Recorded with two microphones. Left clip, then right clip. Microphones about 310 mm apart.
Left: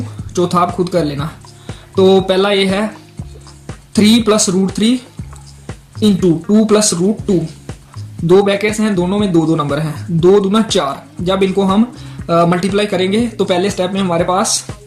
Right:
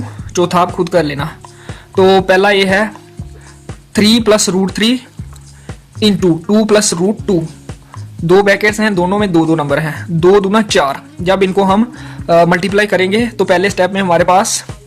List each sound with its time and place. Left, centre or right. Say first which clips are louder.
0.3 s speech: right 2 dB; right
3.9 s speech: right 2 dB; right
6.0 s speech: right 1 dB; right
8.4 s speech: right 4 dB; right